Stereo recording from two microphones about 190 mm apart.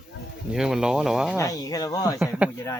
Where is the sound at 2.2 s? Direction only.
5° right (ahead or behind).